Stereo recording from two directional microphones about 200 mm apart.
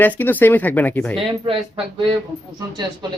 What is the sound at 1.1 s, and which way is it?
Speech, 25° right (ahead or behind).